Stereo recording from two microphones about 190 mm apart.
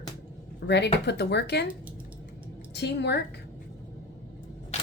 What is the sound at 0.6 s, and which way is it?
Speech, 75° left (ahead or behind).